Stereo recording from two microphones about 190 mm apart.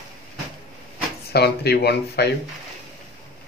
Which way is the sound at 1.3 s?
55° left (ahead or behind).